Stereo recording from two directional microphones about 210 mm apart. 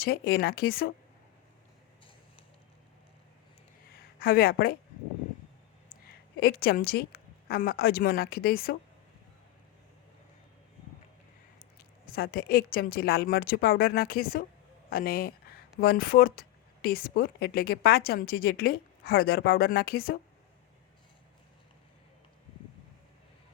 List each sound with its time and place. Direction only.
0.0 s speech: 45° left (ahead or behind)
4.2 s speech: 45° left (ahead or behind)
6.4 s speech: 50° left (ahead or behind)
12.0 s speech: 45° left (ahead or behind)